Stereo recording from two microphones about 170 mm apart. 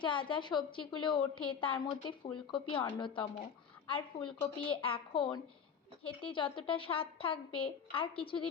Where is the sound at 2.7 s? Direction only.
30° left (ahead or behind).